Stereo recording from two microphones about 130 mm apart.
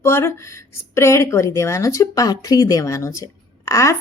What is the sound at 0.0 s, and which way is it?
A woman's voice, 20° left (ahead or behind).